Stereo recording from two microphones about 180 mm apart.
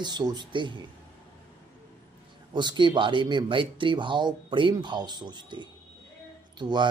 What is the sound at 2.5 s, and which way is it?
Speech, 25° right (ahead or behind).